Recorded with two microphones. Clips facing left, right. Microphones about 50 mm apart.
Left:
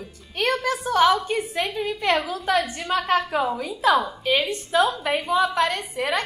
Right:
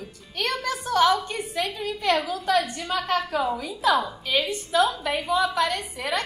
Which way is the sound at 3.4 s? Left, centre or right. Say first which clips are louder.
Left 1 dB; centre.